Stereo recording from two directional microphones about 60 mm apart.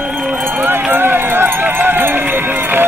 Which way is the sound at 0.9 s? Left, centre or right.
Right.